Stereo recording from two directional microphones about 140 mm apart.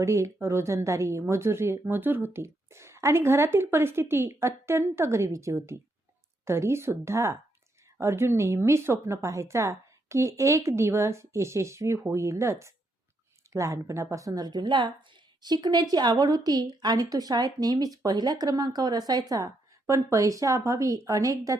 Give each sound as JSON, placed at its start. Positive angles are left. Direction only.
{"t": 0.0, "sound": "a woman's voice", "side_deg": -20}